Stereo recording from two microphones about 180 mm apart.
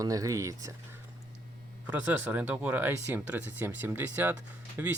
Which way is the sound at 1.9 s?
5° right (ahead or behind).